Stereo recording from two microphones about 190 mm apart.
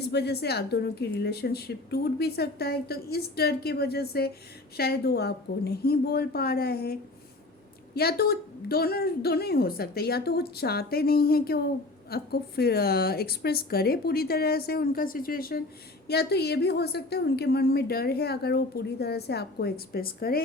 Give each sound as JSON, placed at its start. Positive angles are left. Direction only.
{"t": 0.0, "sound": "a woman's voice", "side_deg": 60}
{"t": 7.9, "sound": "a woman's voice", "side_deg": 55}